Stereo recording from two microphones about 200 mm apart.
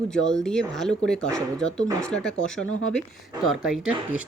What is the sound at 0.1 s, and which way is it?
Speech, 5° left (ahead or behind).